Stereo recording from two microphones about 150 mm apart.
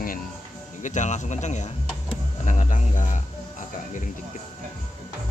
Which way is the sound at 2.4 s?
60° left (ahead or behind).